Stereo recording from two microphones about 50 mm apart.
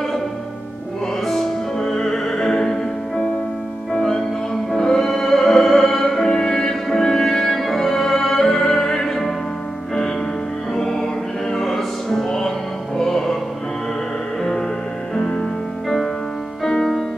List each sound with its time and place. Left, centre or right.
1.2 s music: centre
10.7 s music: centre
15.1 s music: centre
16.6 s music: centre